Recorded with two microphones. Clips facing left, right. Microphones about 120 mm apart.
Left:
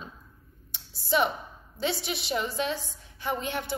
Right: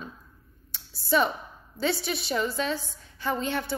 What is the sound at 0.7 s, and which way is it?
Computer keyboard, 20° left (ahead or behind).